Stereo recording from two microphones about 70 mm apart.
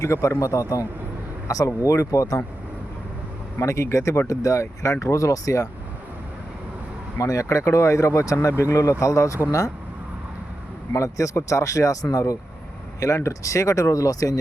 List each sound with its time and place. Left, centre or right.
0.0 s speech: left
3.6 s speech: left
7.2 s speech: left
10.9 s speech: left